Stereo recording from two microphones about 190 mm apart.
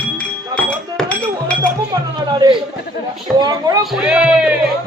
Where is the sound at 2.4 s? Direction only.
20° right (ahead or behind).